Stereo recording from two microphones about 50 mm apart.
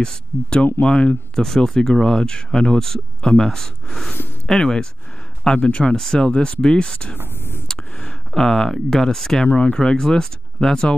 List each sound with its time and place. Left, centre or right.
0.0 s speech: centre
7.6 s a sound: centre
8.3 s speech: centre
9.5 s speech: left
9.8 s speech: centre